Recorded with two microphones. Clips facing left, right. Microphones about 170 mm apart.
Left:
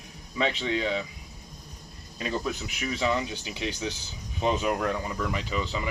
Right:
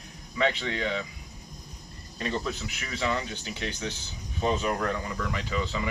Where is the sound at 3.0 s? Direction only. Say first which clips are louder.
Left 1 dB; 15° left (ahead or behind).